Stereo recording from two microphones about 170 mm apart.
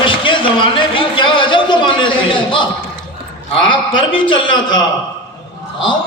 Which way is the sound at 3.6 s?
30° left (ahead or behind).